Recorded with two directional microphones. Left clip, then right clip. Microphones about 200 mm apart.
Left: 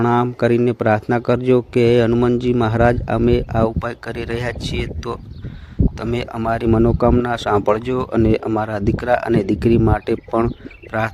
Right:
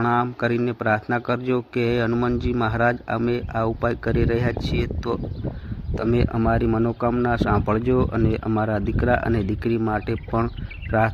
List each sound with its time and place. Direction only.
0.0 s a man's voice: 45° left (ahead or behind)